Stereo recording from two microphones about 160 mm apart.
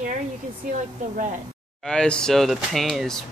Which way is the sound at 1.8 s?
5° left (ahead or behind).